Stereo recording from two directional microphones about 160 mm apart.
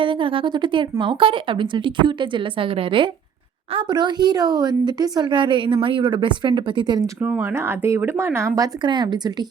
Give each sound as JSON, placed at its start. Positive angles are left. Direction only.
{"t": 0.0, "sound": "a woman's voice", "side_deg": -30}
{"t": 7.2, "sound": "speech", "side_deg": -15}